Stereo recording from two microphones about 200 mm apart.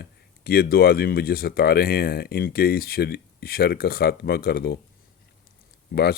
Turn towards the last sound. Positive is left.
turn(degrees=50)  # may be behind; listen again after turning